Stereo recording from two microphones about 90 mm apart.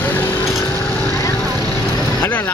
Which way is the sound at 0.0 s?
20° left (ahead or behind).